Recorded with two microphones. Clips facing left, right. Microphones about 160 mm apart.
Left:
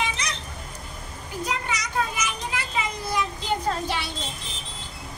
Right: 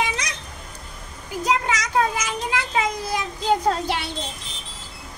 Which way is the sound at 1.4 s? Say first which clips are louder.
Right 7 dB; 90° right.